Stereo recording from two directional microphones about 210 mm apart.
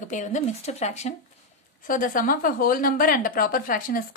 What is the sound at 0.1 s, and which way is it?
A woman's voice, 35° left (ahead or behind).